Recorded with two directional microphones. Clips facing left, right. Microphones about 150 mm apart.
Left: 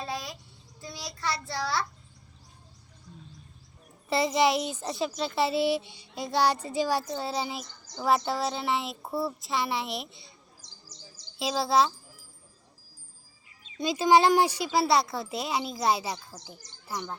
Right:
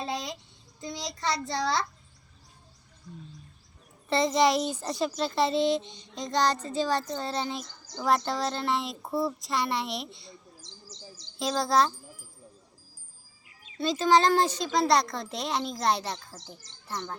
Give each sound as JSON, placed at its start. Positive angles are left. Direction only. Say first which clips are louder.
{"t": 0.0, "sound": "child singing", "louder": "right 2 dB", "side_deg": -20}
{"t": 0.8, "sound": "a child's voice", "louder": "right 3 dB", "side_deg": -20}
{"t": 3.1, "sound": "a child's voice", "louder": "right 4 dB", "side_deg": 10}
{"t": 11.3, "sound": "speech", "louder": "even", "side_deg": 5}
{"t": 13.7, "sound": "a child's voice", "louder": "left 1 dB", "side_deg": 10}